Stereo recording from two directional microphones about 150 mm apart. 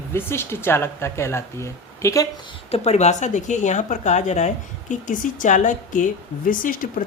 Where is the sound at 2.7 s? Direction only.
45° left (ahead or behind).